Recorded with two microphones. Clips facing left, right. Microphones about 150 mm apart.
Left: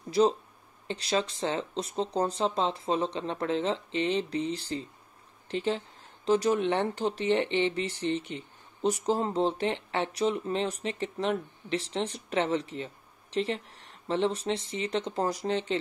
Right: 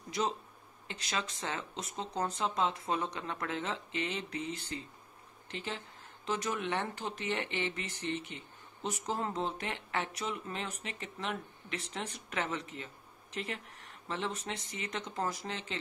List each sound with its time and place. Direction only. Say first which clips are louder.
0.8 s speech: left 9 dB; 30° left (ahead or behind)